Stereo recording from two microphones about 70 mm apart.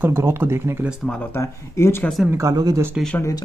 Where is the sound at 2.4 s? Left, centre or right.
Right.